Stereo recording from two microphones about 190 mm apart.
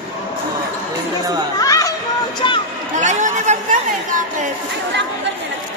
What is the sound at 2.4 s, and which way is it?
Speech, 25° left (ahead or behind).